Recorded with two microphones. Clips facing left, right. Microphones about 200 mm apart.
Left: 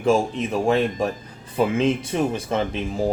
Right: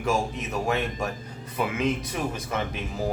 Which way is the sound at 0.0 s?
30° left (ahead or behind).